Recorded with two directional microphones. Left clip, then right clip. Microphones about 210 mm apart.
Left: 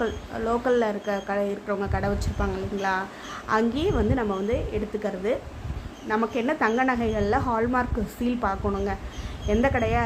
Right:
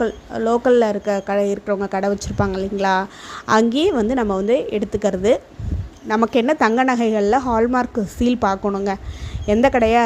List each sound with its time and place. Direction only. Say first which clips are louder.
0.0 s speech: right 7 dB; 30° right (ahead or behind)